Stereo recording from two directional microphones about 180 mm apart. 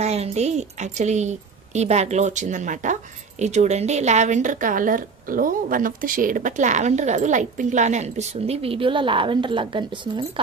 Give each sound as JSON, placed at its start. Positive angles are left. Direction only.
{"t": 0.0, "sound": "a woman's voice", "side_deg": -35}